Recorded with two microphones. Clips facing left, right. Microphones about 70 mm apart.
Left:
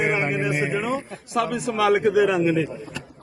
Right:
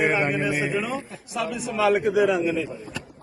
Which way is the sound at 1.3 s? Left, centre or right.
Left.